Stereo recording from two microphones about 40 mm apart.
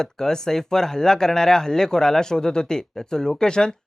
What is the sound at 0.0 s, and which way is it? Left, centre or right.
Speech, centre.